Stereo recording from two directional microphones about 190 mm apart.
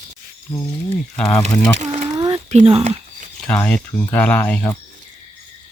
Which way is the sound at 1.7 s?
35° right (ahead or behind).